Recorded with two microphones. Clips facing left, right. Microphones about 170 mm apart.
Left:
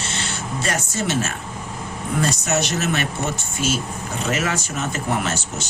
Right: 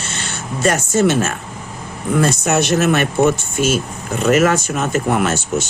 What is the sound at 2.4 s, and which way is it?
Speech, 55° right (ahead or behind).